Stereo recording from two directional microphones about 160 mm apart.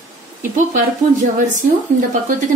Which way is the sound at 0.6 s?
50° right (ahead or behind).